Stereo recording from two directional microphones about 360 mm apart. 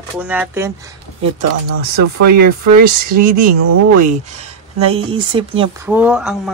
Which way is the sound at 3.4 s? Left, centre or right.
Right.